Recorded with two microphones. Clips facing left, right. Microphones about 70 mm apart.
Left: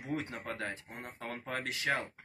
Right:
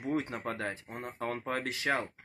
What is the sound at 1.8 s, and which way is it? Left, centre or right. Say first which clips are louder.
Speech: right 2 dB; right.